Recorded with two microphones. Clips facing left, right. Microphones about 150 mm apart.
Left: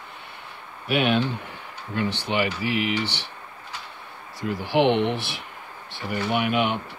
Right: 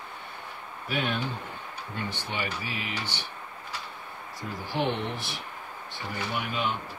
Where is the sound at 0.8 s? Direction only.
75° left (ahead or behind).